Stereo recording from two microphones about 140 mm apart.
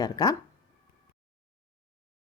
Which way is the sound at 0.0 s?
30° left (ahead or behind).